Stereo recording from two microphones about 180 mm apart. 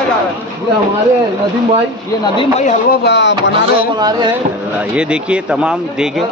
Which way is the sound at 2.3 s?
40° left (ahead or behind).